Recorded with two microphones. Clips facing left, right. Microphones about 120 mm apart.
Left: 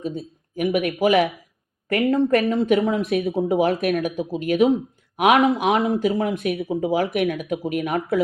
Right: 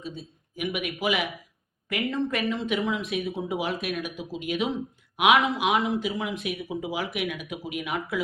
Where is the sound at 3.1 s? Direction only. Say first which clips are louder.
Left 7 dB; 65° left (ahead or behind).